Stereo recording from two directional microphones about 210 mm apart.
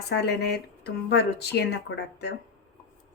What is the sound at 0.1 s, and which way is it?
Speech, 50° left (ahead or behind).